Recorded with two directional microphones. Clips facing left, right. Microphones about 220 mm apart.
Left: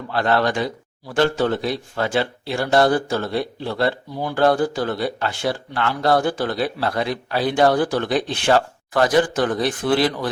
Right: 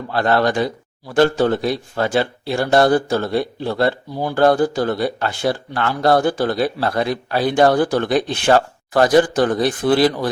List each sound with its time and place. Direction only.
0.1 s speech: 40° right (ahead or behind)